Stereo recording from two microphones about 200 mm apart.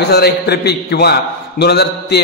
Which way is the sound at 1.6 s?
55° left (ahead or behind).